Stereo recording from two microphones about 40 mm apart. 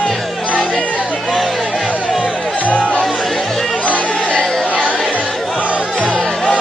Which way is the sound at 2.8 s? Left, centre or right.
Left.